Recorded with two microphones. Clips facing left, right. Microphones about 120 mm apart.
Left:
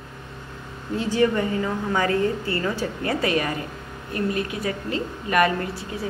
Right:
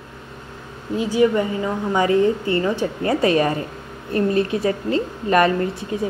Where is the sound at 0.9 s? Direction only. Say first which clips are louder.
Right 4 dB; 15° right (ahead or behind).